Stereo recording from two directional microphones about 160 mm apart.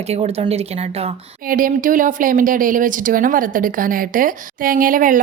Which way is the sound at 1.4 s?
60° right (ahead or behind).